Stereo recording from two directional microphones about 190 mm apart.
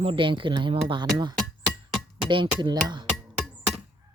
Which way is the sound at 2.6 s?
25° right (ahead or behind).